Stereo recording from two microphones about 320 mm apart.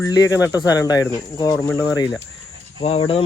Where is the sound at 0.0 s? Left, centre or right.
Centre.